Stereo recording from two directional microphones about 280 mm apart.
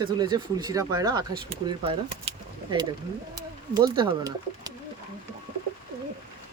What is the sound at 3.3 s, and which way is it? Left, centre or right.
Bird, centre.